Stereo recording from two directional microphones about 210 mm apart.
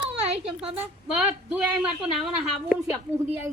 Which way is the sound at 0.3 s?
30° right (ahead or behind).